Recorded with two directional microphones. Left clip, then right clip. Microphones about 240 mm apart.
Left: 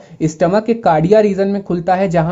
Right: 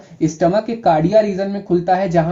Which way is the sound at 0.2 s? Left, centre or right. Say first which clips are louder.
Left 1 dB; left.